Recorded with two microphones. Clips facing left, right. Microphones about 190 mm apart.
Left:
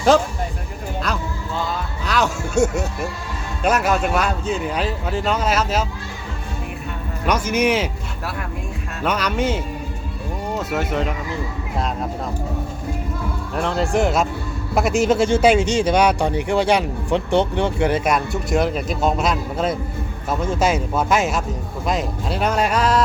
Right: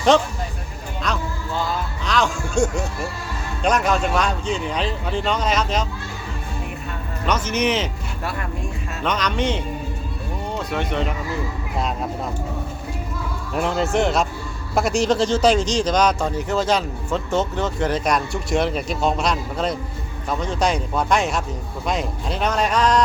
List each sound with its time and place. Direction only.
0.1 s speech: centre (ahead or behind)
1.1 s music: centre (ahead or behind)
2.0 s speech: 5° left (ahead or behind)
7.3 s speech: 10° left (ahead or behind)
9.0 s speech: 10° left (ahead or behind)
13.6 s speech: 5° right (ahead or behind)